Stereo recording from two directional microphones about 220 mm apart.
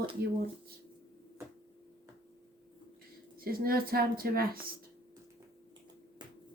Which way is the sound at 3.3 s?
40° right (ahead or behind).